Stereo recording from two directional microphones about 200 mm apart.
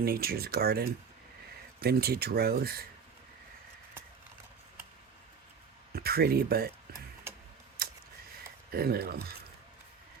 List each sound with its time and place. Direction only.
0.0 s speech: 50° right (ahead or behind)
5.9 s speech: 50° right (ahead or behind)
7.3 s tick-tock: 10° right (ahead or behind)
7.8 s a sound: 50° right (ahead or behind)
8.7 s speech: 50° right (ahead or behind)